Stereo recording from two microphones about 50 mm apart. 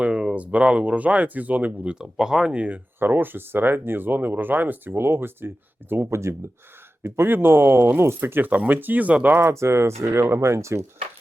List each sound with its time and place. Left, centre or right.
0.0 s speech: centre
2.0 s speech: centre
2.6 s speech: right
3.0 s speech: right
4.9 s speech: right
7.0 s speech: right
9.4 s speech: right